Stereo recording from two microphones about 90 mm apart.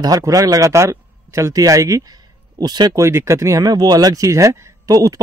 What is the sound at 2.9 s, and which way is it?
Speech, 35° right (ahead or behind).